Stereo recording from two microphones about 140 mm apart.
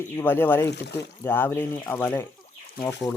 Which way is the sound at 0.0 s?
15° left (ahead or behind).